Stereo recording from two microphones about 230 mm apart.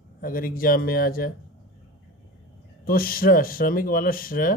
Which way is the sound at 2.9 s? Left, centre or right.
Left.